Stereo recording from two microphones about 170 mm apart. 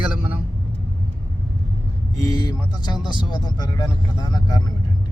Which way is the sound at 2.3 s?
25° left (ahead or behind).